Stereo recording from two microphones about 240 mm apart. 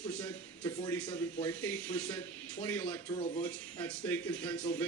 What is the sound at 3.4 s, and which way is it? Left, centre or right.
Speech, centre.